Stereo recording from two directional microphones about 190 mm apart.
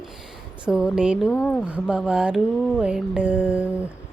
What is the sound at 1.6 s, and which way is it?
Music, 5° right (ahead or behind).